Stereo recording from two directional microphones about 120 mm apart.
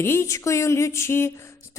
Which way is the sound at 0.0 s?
20° left (ahead or behind).